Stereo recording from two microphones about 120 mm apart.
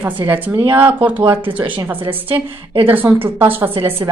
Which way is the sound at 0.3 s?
15° right (ahead or behind).